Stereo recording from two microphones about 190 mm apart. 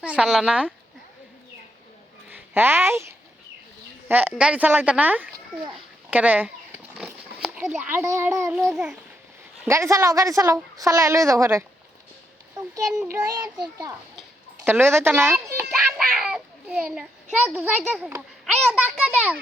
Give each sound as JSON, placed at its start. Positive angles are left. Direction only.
{"t": 0.0, "sound": "a child's voice", "side_deg": -5}
{"t": 2.6, "sound": "a woman's voice", "side_deg": -10}
{"t": 4.1, "sound": "a woman's voice", "side_deg": -10}
{"t": 8.5, "sound": "a child's voice", "side_deg": 0}
{"t": 9.6, "sound": "a woman's voice", "side_deg": -15}
{"t": 13.2, "sound": "a child's voice", "side_deg": -20}